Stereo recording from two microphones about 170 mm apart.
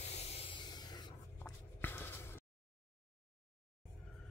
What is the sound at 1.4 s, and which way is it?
Writing, 10° left (ahead or behind).